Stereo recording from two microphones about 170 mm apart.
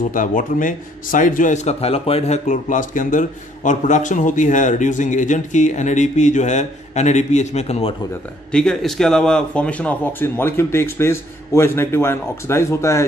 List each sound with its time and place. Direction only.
0.1 s a man's voice: 50° left (ahead or behind)
8.5 s speech: 5° left (ahead or behind)